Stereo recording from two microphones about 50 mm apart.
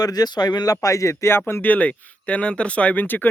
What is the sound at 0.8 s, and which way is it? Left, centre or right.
Speech, left.